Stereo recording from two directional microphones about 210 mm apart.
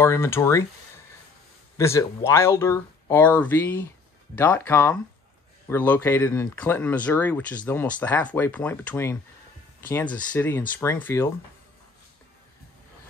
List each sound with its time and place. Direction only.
0.0 s speech: 10° left (ahead or behind)
1.8 s speech: 15° left (ahead or behind)